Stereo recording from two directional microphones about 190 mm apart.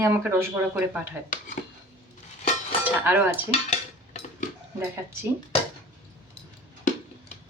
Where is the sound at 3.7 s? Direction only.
35° left (ahead or behind).